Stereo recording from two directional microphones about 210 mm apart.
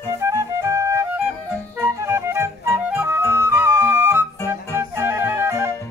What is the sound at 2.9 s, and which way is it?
Flute, 10° right (ahead or behind).